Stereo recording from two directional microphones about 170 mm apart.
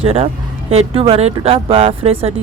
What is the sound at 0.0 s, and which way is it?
A woman's voice, 35° right (ahead or behind).